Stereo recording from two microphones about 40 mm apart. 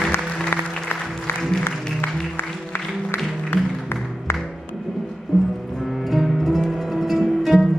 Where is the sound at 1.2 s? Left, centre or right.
Left.